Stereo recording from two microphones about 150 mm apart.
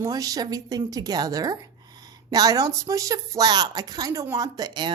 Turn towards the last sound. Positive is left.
turn(degrees=-30)  # may be behind; listen again after turning